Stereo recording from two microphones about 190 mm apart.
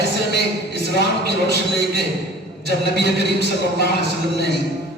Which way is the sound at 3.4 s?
60° right (ahead or behind).